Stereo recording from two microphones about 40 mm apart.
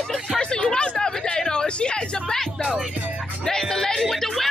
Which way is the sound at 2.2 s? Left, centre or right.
Centre.